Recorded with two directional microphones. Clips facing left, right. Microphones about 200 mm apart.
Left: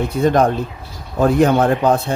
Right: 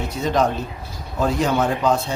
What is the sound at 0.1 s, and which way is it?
A man's voice, 55° left (ahead or behind).